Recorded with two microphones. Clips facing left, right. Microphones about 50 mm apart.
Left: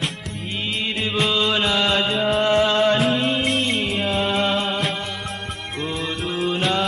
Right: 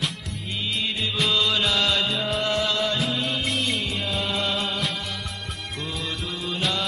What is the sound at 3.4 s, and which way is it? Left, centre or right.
Music, left.